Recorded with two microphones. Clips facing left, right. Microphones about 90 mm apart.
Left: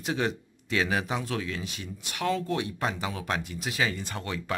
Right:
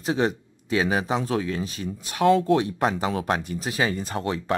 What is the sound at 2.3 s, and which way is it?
Speech, 50° right (ahead or behind).